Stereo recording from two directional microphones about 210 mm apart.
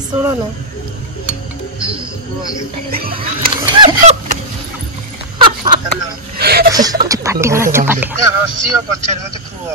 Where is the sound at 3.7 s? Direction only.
30° right (ahead or behind).